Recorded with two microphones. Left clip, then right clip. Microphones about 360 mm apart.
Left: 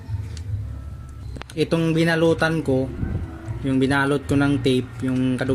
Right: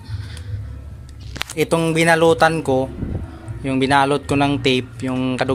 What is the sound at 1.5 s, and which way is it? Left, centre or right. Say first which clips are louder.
Speech: right 3 dB; centre.